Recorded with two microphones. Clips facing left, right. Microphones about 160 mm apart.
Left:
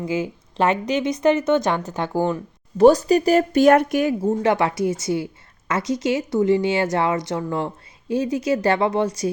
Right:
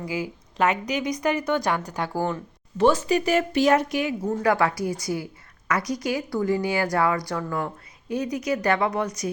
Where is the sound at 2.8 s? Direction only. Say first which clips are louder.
Left 7 dB; 40° left (ahead or behind).